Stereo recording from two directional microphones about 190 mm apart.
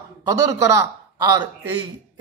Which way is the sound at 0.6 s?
15° right (ahead or behind).